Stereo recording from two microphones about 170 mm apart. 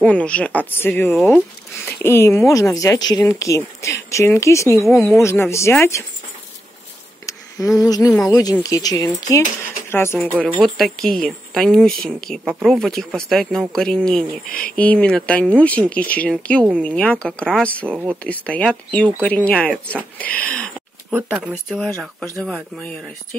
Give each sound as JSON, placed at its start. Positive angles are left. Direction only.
{"t": 0.0, "sound": "speech", "side_deg": 5}
{"t": 4.8, "sound": "speech", "side_deg": 0}
{"t": 5.2, "sound": "speech", "side_deg": 15}
{"t": 7.2, "sound": "a sound", "side_deg": 20}
{"t": 8.3, "sound": "speech", "side_deg": 20}
{"t": 21.1, "sound": "speech", "side_deg": -10}
{"t": 21.6, "sound": "speech", "side_deg": 5}